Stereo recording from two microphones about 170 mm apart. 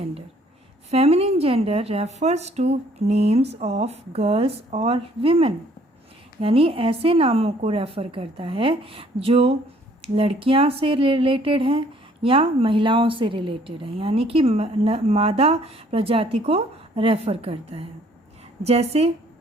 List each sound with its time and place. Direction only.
0.9 s speech: 35° right (ahead or behind)